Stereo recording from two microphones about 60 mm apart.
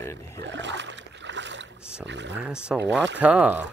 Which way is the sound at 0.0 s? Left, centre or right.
Left.